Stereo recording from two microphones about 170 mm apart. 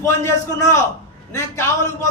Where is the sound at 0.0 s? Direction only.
15° left (ahead or behind).